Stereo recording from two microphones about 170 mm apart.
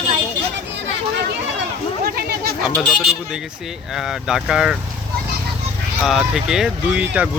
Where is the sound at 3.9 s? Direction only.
Centre (ahead or behind).